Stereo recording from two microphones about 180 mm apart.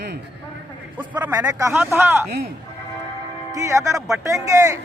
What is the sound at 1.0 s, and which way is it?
A man's voice, 10° right (ahead or behind).